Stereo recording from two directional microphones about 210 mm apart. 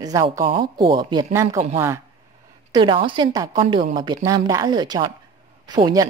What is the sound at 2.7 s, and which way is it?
A woman's voice, 25° right (ahead or behind).